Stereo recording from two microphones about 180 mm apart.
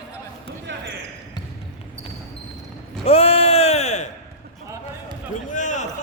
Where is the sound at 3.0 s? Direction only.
35° left (ahead or behind).